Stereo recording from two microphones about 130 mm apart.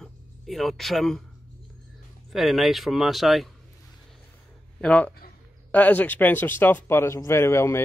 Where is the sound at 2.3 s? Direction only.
Centre (ahead or behind).